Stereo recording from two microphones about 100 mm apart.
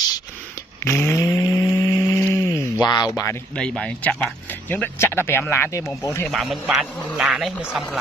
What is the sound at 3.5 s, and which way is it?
Speech, 10° left (ahead or behind).